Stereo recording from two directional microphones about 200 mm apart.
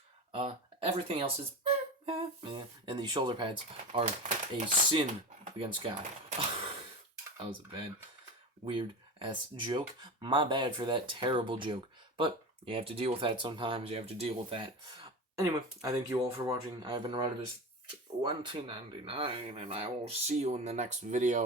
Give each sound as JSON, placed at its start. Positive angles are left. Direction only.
{"t": 0.3, "sound": "speech", "side_deg": -25}
{"t": 7.3, "sound": "speech", "side_deg": -25}
{"t": 15.4, "sound": "speech", "side_deg": -15}